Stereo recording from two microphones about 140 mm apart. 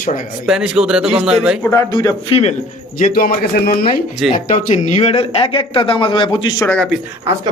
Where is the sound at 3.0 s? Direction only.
90° left.